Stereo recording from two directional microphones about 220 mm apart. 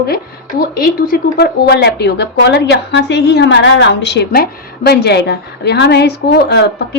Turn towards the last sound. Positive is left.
turn(degrees=50)  # may be behind; listen again after turning